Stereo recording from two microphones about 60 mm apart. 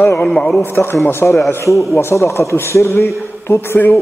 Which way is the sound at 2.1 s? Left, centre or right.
Left.